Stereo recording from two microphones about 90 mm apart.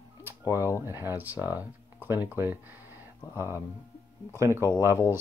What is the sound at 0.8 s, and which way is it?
Speech, 25° right (ahead or behind).